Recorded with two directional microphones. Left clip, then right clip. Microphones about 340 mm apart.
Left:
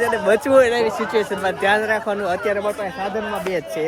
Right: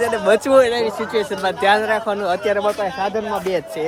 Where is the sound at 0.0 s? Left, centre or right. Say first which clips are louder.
Right 1 dB; centre.